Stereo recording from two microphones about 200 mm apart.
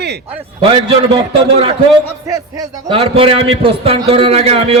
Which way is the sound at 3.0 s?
30° right (ahead or behind).